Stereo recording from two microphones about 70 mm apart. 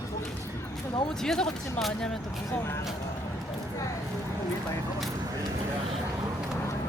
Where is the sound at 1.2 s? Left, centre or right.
Centre.